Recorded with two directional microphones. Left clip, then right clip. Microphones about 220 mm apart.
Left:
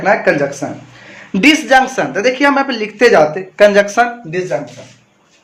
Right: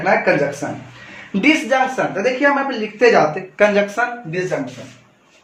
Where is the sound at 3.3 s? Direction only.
25° left (ahead or behind).